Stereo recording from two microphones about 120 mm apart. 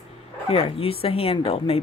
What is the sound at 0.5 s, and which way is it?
Speech, 55° left (ahead or behind).